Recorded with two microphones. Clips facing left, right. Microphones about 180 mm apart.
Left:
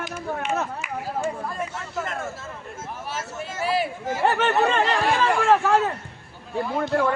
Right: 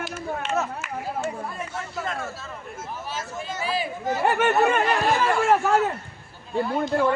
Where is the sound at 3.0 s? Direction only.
70° left (ahead or behind).